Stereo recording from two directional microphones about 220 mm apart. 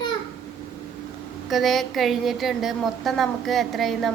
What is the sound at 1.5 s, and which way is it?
A woman's voice, centre (ahead or behind).